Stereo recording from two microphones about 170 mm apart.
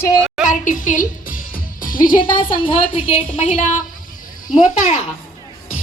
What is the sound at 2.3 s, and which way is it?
Speech, 30° left (ahead or behind).